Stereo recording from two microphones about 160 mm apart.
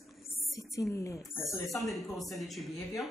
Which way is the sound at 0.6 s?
20° left (ahead or behind).